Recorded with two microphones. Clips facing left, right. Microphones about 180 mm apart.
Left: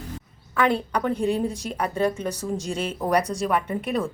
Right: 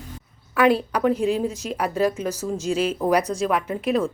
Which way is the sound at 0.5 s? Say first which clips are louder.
Right 4 dB; 5° right (ahead or behind).